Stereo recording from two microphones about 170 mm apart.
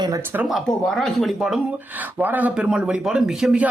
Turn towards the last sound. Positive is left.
turn(degrees=-5)  # may be behind; listen again after turning